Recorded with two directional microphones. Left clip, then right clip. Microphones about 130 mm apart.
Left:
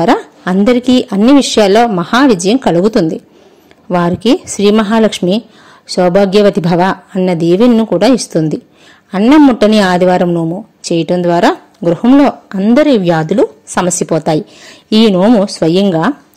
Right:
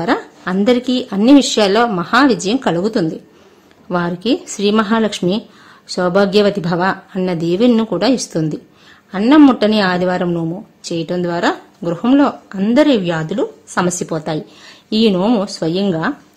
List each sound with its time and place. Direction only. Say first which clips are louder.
0.0 s a sound: left 7 dB; 55° left (ahead or behind)
0.7 s a woman's voice: left 5 dB; 45° left (ahead or behind)
9.6 s a woman's voice: left 6 dB; 50° left (ahead or behind); by 10.6 s 35° left (ahead or behind)
10.8 s a woman's voice: left 8 dB; 50° left (ahead or behind)